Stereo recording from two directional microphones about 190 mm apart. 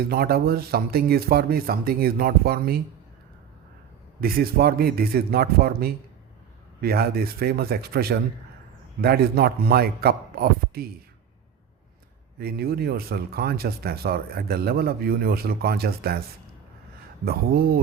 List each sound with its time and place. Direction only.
0.1 s speech: 55° right (ahead or behind)
4.2 s speech: 55° right (ahead or behind)
12.4 s speech: 55° right (ahead or behind)
17.2 s speech: 55° right (ahead or behind)